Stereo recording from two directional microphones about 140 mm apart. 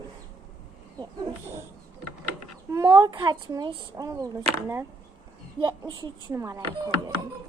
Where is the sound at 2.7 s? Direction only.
25° right (ahead or behind).